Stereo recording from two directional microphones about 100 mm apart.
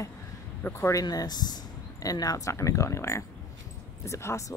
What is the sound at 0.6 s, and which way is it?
A woman's voice, 25° left (ahead or behind).